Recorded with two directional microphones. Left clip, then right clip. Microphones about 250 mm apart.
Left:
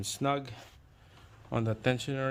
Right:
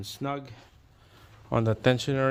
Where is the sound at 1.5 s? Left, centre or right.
Right.